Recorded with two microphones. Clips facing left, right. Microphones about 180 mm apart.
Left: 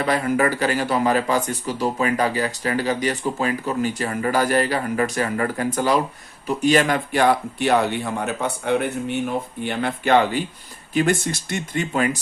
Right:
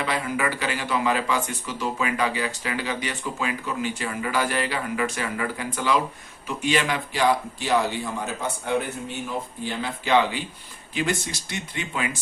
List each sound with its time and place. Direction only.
0.0 s a man's voice: 45° left (ahead or behind)